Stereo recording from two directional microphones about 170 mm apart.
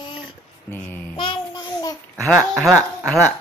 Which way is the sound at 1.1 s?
25° left (ahead or behind).